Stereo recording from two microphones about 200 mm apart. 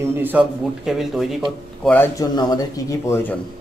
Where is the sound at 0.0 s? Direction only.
10° right (ahead or behind).